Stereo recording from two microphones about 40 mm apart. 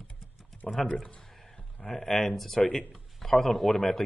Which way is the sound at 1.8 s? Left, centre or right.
Centre.